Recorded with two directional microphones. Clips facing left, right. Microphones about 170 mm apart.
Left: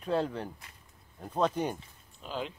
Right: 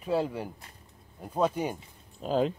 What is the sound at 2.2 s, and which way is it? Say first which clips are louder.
Speech: right 10 dB; 40° right (ahead or behind).